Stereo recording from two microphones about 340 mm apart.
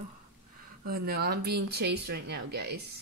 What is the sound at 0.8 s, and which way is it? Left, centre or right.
Speech, right.